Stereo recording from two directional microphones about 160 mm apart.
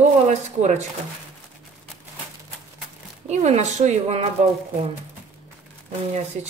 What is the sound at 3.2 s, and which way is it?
A woman's voice, 45° right (ahead or behind).